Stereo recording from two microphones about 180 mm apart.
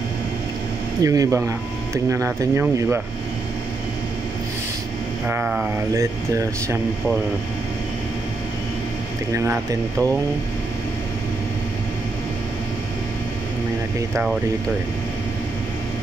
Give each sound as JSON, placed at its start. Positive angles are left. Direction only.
{"t": 1.0, "sound": "speech", "side_deg": -20}
{"t": 5.2, "sound": "speech", "side_deg": -10}
{"t": 9.3, "sound": "speech", "side_deg": -15}